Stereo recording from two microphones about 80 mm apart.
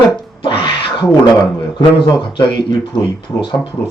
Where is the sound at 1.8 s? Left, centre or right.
Left.